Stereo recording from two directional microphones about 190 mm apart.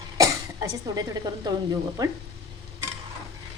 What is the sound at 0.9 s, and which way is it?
Speech, 20° right (ahead or behind).